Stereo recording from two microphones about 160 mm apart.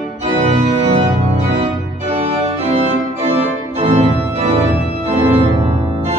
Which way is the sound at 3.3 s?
40° right (ahead or behind).